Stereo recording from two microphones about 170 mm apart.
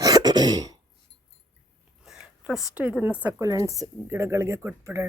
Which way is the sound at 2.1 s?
5° right (ahead or behind).